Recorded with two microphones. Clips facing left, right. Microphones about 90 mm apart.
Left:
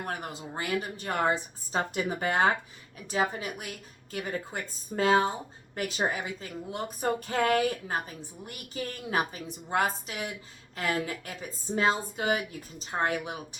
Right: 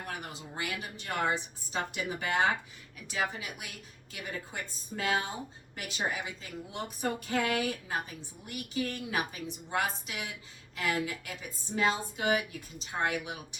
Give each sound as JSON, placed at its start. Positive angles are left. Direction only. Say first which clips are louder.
{"t": 0.0, "sound": "speech", "louder": "left 5 dB", "side_deg": 40}